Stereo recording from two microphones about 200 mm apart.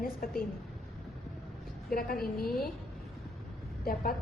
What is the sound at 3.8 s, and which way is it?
Speech, 45° left (ahead or behind).